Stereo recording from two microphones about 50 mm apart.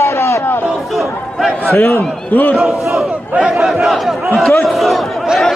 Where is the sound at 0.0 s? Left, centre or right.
Left.